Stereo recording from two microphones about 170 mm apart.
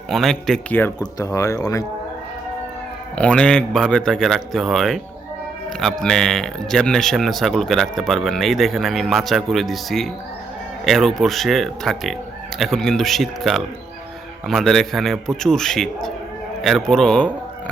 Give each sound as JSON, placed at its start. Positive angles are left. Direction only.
{"t": 0.1, "sound": "speech", "side_deg": 0}
{"t": 0.9, "sound": "speech", "side_deg": 20}
{"t": 3.2, "sound": "speech", "side_deg": 5}